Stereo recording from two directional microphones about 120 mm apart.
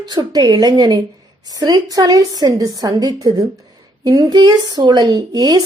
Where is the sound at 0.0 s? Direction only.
35° right (ahead or behind).